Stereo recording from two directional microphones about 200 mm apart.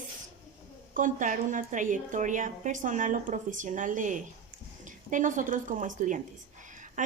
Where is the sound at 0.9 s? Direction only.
40° right (ahead or behind).